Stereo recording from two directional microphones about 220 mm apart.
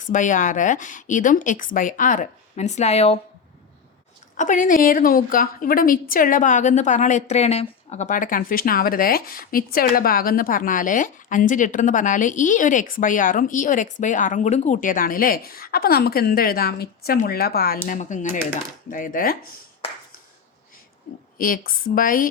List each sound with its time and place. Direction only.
0.0 s a woman's voice: 35° left (ahead or behind)
4.4 s a woman's voice: 35° left (ahead or behind)
21.3 s a woman's voice: 40° left (ahead or behind)